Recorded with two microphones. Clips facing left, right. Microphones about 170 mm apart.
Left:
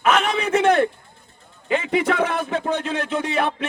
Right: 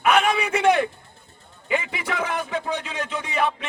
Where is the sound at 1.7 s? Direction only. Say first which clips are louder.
Left 6 dB; 60° left (ahead or behind).